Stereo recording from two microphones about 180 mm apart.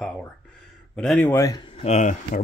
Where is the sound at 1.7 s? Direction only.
35° left (ahead or behind).